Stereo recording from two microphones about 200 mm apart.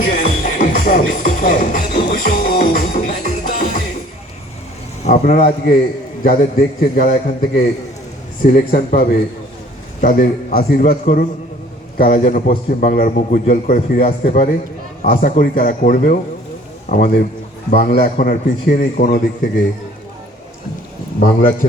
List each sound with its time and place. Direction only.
0.0 s music: 40° left (ahead or behind)
5.0 s a man's voice: 35° left (ahead or behind)
6.9 s a man's voice: 45° left (ahead or behind)
21.2 s a man's voice: 35° left (ahead or behind)